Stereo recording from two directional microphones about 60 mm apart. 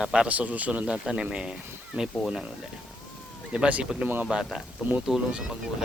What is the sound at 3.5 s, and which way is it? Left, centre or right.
Speech, centre.